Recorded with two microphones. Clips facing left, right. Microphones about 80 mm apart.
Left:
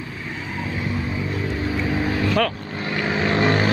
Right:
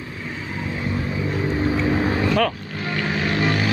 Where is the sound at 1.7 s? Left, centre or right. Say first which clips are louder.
Right 2 dB; right.